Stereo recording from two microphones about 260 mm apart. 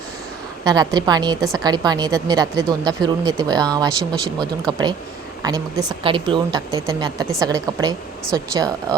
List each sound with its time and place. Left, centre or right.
0.6 s a woman's voice: centre